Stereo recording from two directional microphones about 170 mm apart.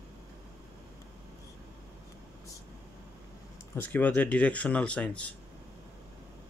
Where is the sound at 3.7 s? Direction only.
10° left (ahead or behind).